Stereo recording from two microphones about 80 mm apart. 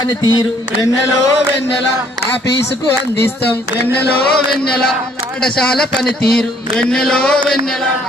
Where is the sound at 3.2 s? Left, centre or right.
Left.